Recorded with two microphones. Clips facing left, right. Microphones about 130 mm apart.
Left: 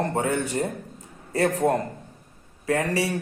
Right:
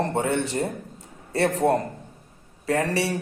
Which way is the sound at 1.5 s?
35° right (ahead or behind).